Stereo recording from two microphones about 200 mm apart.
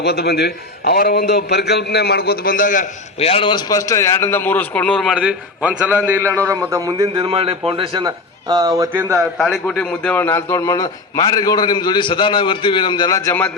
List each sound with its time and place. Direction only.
0.0 s a man's voice: 55° left (ahead or behind)
3.2 s a man's voice: 30° left (ahead or behind); by 9.1 s 15° right (ahead or behind)
9.1 s a man's voice: centre (ahead or behind)